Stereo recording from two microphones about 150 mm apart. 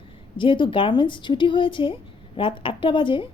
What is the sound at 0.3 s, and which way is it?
A woman's voice, 35° left (ahead or behind).